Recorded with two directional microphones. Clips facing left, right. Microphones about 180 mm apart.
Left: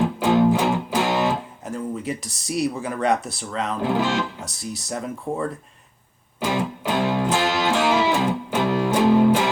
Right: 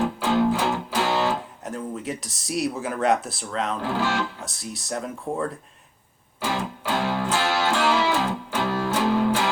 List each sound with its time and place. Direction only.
0.2 s music: 15° left (ahead or behind)
1.6 s speech: centre (ahead or behind)
3.8 s speech: 20° left (ahead or behind)
4.4 s speech: centre (ahead or behind)
6.8 s music: 20° left (ahead or behind)